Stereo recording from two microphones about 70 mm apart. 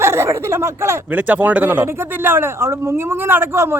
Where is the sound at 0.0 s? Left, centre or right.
Right.